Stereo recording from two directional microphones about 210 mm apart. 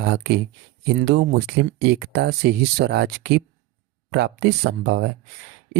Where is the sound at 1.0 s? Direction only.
55° right (ahead or behind).